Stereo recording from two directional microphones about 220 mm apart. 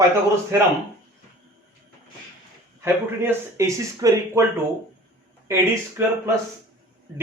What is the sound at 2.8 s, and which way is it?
Speech, 10° right (ahead or behind).